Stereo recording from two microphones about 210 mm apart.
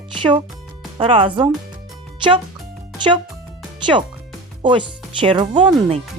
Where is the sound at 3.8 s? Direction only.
20° right (ahead or behind).